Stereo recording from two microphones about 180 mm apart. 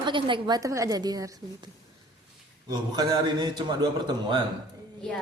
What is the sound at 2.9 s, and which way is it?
Speech, 25° right (ahead or behind).